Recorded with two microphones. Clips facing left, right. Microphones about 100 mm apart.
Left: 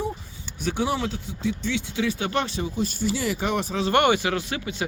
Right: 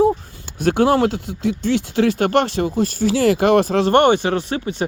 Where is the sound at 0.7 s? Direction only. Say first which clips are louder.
Right 10 dB; 80° right.